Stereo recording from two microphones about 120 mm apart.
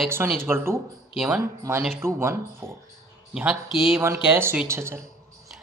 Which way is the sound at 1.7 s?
20° right (ahead or behind).